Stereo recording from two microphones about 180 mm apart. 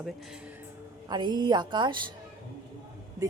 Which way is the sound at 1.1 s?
25° right (ahead or behind).